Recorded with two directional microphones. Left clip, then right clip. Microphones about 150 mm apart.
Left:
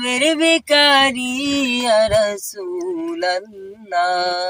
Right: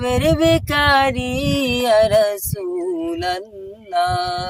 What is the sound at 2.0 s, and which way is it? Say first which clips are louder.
Female singing: right 2 dB; 45° right (ahead or behind).